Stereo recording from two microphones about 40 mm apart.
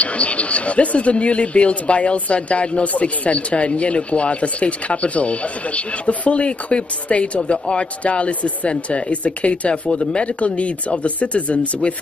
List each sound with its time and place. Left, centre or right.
0.0 s speech: left